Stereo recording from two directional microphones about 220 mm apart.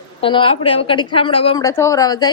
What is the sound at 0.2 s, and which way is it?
A woman's voice, 25° left (ahead or behind).